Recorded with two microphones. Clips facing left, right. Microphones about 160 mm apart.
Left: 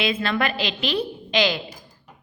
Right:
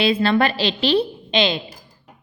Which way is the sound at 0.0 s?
30° right (ahead or behind).